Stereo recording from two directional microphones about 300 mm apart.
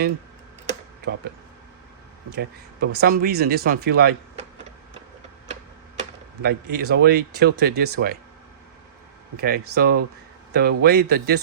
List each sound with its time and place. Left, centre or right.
2.3 s speech: right
6.0 s speech: right
9.4 s speech: right